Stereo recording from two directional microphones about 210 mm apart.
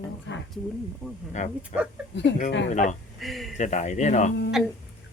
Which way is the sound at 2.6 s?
35° left (ahead or behind).